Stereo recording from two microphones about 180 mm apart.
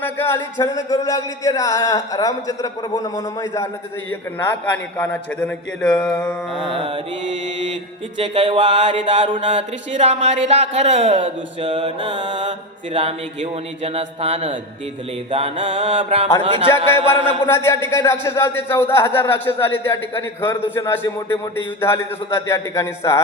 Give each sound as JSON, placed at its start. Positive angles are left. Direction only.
{"t": 0.0, "sound": "a man's voice", "side_deg": 10}
{"t": 6.7, "sound": "mantra", "side_deg": -30}
{"t": 8.2, "sound": "a sound", "side_deg": -30}
{"t": 9.5, "sound": "mantra", "side_deg": -40}
{"t": 16.4, "sound": "a sound", "side_deg": -30}
{"t": 17.4, "sound": "a man's voice", "side_deg": 15}